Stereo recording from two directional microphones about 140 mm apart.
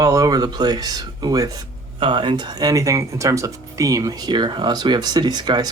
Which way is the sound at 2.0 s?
35° right (ahead or behind).